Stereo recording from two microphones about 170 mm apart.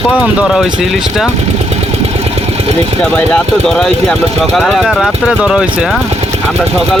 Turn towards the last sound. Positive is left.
turn(degrees=-5)  # may be behind; listen again after turning